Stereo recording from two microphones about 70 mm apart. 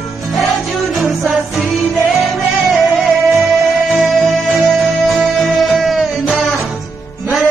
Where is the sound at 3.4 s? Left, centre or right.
Centre.